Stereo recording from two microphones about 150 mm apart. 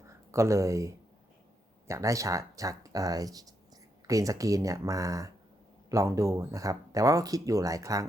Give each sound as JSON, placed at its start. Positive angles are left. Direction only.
{"t": 0.1, "sound": "speech", "side_deg": -20}